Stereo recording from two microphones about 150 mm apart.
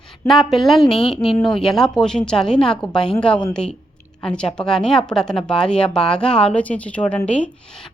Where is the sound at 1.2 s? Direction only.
35° left (ahead or behind).